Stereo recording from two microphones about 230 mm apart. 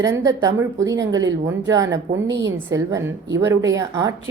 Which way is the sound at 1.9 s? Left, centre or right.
Right.